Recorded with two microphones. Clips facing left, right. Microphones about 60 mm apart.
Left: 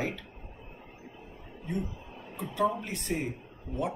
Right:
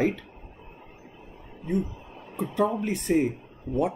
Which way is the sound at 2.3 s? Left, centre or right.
Right.